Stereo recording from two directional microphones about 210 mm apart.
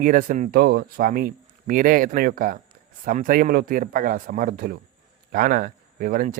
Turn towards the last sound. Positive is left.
turn(degrees=-40)  # may be behind; listen again after turning